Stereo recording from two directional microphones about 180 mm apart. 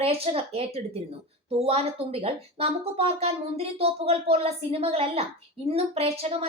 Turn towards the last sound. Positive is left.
turn(degrees=-35)  # may be behind; listen again after turning